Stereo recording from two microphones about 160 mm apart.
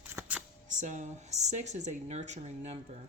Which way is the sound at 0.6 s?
50° right (ahead or behind).